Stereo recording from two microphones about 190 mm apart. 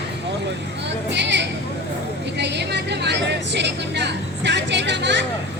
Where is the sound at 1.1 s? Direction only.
65° right (ahead or behind).